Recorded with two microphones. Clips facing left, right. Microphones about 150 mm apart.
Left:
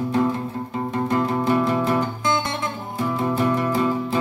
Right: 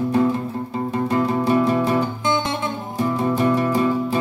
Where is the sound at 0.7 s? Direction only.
30° right (ahead or behind).